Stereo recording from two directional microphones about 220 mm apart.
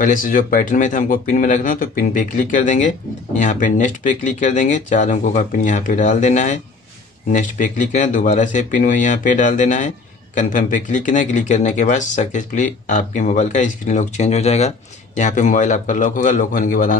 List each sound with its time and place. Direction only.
0.0 s speech: 40° left (ahead or behind)